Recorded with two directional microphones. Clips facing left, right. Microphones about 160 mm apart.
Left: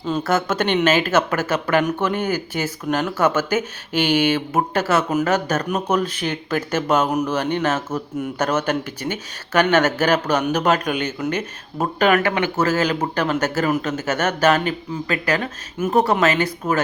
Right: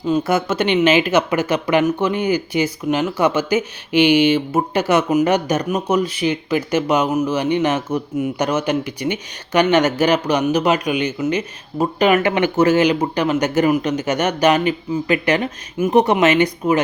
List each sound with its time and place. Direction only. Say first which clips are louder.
0.1 s speech: right 3 dB; 10° right (ahead or behind)
2.1 s speech: right 4 dB; 50° left (ahead or behind)
2.6 s speech: right 3 dB; 10° right (ahead or behind)